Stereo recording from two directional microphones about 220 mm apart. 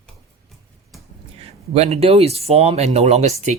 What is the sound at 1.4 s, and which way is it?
Speech, 30° right (ahead or behind).